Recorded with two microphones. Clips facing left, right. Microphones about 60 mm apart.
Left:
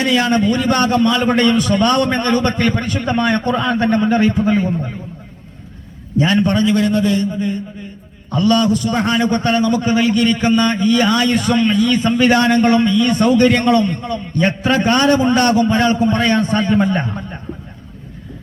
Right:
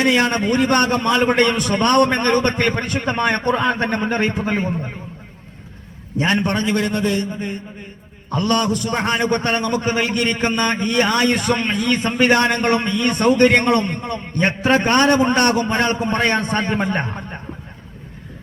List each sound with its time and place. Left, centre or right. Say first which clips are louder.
0.1 s a man's voice: left 2 dB; right
6.1 s a man's voice: left 4 dB; right